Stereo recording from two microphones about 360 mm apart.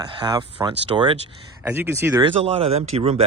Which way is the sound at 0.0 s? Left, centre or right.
Centre.